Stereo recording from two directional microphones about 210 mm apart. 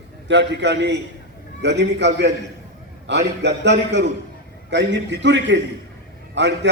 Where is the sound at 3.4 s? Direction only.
55° right (ahead or behind).